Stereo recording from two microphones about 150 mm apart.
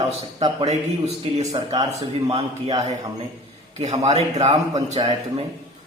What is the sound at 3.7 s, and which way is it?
A man's voice, 50° right (ahead or behind).